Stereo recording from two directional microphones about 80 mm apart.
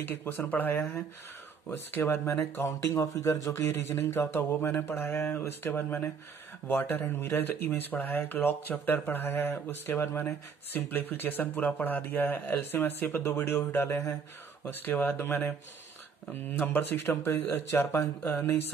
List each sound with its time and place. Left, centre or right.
0.0 s speech: left
2.9 s speech: left